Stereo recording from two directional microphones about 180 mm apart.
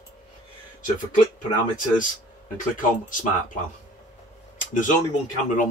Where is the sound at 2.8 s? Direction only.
45° left (ahead or behind).